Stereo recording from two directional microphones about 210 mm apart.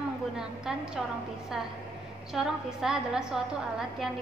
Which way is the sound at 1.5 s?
Centre (ahead or behind).